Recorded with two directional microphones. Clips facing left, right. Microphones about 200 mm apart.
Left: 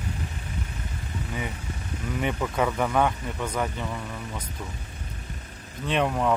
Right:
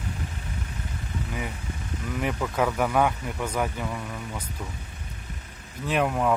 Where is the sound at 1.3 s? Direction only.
Centre (ahead or behind).